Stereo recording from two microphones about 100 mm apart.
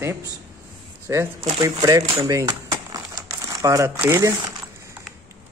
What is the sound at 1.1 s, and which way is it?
Speech, 30° right (ahead or behind).